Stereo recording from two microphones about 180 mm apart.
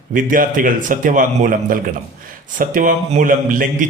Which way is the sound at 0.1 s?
50° right (ahead or behind).